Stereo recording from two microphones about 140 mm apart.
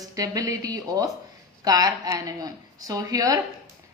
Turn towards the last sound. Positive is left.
turn(degrees=-25)  # may be behind; listen again after turning